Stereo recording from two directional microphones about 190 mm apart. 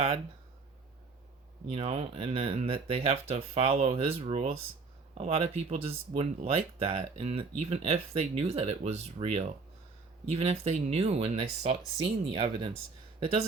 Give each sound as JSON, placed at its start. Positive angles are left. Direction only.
{"t": 1.7, "sound": "speech", "side_deg": -35}